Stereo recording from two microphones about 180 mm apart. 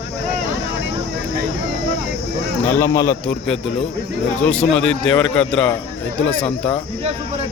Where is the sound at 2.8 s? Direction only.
15° left (ahead or behind).